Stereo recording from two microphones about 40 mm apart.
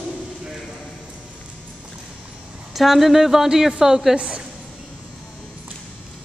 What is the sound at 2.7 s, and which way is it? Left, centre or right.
Speech, centre.